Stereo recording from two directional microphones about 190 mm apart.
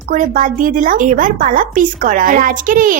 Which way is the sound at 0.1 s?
45° right (ahead or behind).